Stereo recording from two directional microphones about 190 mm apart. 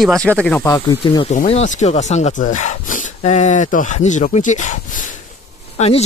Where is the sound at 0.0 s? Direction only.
5° left (ahead or behind).